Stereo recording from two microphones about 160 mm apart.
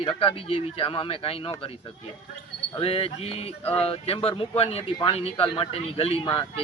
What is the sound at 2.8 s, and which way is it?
Speech, 35° left (ahead or behind).